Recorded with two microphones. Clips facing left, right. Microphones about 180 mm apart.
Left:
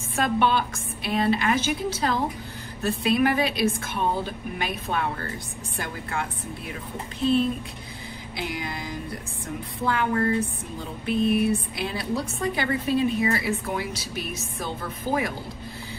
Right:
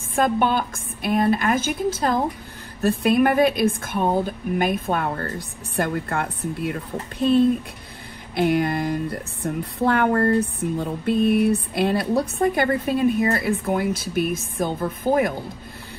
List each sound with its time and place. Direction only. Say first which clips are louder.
0.1 s speech: right 3 dB; 50° right (ahead or behind)
8.4 s speech: right 12 dB; 55° right (ahead or behind)